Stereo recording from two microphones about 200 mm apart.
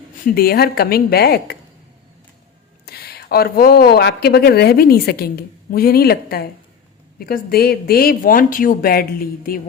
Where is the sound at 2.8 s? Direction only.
50° left (ahead or behind).